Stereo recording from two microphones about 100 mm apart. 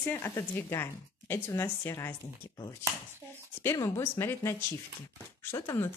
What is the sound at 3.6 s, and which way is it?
A woman's voice, 25° left (ahead or behind).